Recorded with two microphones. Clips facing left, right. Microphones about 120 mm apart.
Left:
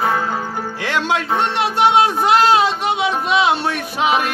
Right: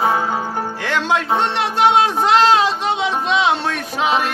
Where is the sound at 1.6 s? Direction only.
15° left (ahead or behind).